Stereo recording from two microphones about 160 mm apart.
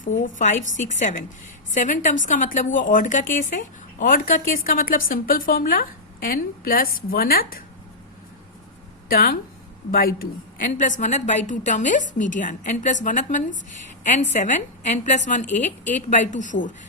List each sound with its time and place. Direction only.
0.0 s a woman's voice: 50° left (ahead or behind)
9.0 s a woman's voice: 65° left (ahead or behind)